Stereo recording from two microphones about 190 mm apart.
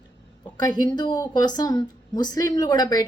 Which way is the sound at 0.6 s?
20° left (ahead or behind).